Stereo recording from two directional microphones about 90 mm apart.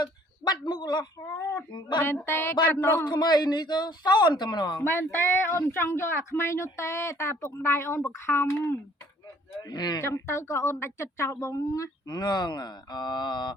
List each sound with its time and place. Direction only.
0.0 s a sound: 50° left (ahead or behind)
2.0 s speech: 25° left (ahead or behind)
3.1 s speech: 50° left (ahead or behind)
4.8 s speech: 25° left (ahead or behind)
9.6 s speech: 50° left (ahead or behind)
10.0 s speech: 35° left (ahead or behind); by 13.5 s 55° left (ahead or behind)